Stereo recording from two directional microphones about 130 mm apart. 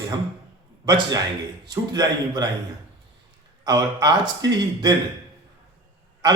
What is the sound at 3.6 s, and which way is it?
A man's voice, 30° right (ahead or behind).